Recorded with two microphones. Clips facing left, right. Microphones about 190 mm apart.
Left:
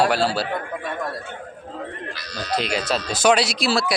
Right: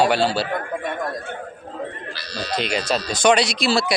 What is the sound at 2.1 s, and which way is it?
Bleat, 30° right (ahead or behind).